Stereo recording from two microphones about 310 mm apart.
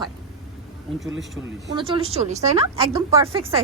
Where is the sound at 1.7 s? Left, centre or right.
Centre.